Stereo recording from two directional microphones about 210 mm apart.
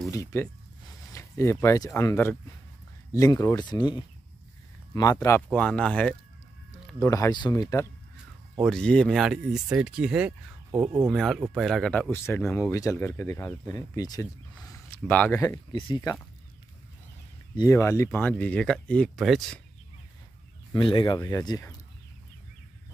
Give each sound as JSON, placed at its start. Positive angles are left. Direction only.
{"t": 0.1, "sound": "speech", "side_deg": 15}
{"t": 7.0, "sound": "speech", "side_deg": 15}
{"t": 8.6, "sound": "speech", "side_deg": 5}
{"t": 15.0, "sound": "speech", "side_deg": 5}
{"t": 17.6, "sound": "speech", "side_deg": 15}
{"t": 20.7, "sound": "speech", "side_deg": 20}